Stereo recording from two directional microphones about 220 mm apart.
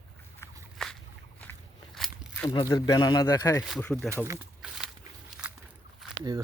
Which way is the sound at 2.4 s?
15° left (ahead or behind).